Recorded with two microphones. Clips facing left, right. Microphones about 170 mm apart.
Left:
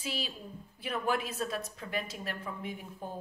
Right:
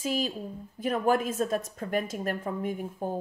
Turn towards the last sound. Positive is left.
turn(degrees=-45)  # may be behind; listen again after turning